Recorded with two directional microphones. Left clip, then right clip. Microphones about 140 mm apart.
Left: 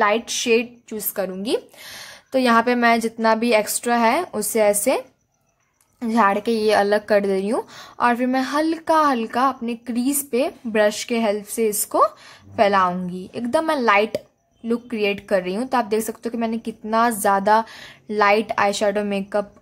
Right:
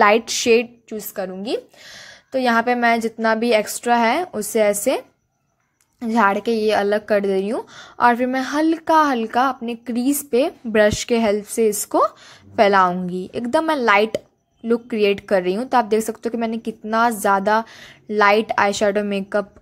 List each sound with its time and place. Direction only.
0.0 s a woman's voice: 35° right (ahead or behind)
0.8 s a woman's voice: 5° right (ahead or behind); by 19.4 s 25° right (ahead or behind)